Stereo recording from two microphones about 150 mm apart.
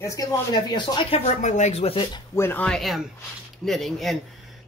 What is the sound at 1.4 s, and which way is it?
Speech, 50° left (ahead or behind).